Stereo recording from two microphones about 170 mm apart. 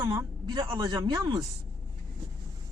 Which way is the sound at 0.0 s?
25° right (ahead or behind).